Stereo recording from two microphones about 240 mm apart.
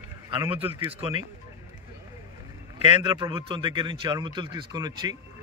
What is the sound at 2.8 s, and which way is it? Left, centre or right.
Speech, right.